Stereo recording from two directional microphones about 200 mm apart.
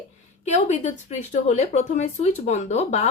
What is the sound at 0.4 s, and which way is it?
Speech, 35° left (ahead or behind).